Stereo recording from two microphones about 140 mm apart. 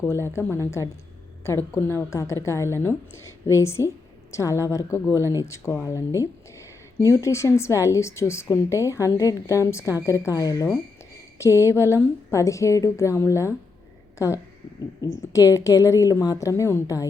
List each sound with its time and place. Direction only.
0.0 s a woman's voice: 15° left (ahead or behind)
15.3 s a woman's voice: 25° left (ahead or behind)